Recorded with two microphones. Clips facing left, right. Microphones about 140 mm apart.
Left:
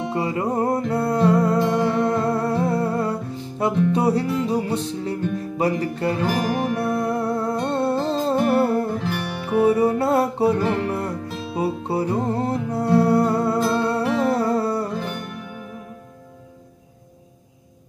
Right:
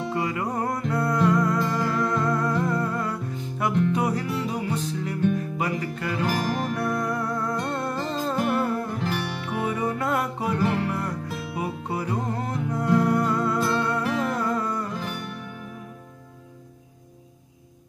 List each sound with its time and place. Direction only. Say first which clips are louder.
0.1 s music: left 5 dB; 30° left (ahead or behind)
6.2 s music: left 1 dB; centre (ahead or behind)
7.0 s music: left 5 dB; 30° left (ahead or behind)
9.0 s music: left 2 dB; centre (ahead or behind)
9.7 s music: left 7 dB; 35° left (ahead or behind)
15.0 s music: left 4 dB; centre (ahead or behind)